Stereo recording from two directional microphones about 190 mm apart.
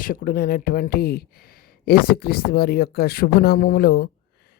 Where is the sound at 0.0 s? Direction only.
45° left (ahead or behind).